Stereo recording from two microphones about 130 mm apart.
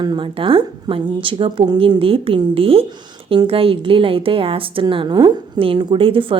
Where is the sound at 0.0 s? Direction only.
35° right (ahead or behind).